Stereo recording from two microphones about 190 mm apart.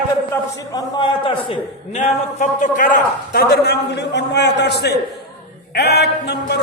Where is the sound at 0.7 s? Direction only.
20° left (ahead or behind).